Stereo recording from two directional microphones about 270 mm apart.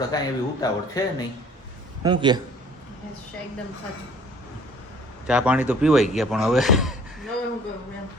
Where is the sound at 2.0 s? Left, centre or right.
Centre.